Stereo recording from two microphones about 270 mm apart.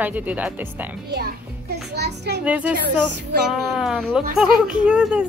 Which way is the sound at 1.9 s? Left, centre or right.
Right.